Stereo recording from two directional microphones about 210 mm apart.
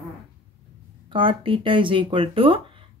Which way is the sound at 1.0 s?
25° right (ahead or behind).